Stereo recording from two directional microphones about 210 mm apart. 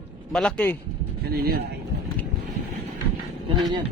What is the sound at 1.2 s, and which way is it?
Speech, 45° right (ahead or behind).